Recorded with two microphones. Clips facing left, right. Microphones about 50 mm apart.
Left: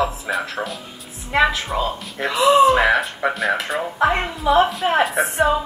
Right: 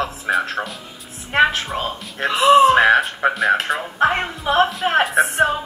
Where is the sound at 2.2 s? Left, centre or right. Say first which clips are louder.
Right 2 dB; right.